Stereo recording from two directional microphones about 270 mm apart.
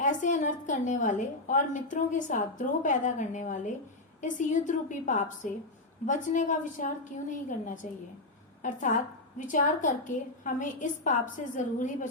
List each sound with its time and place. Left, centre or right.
0.0 s a woman's voice: left